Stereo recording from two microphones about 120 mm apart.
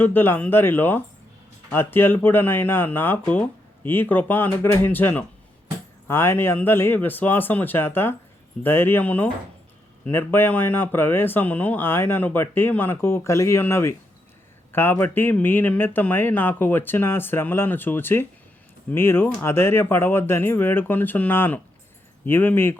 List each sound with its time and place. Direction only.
0.0 s speech: 15° left (ahead or behind)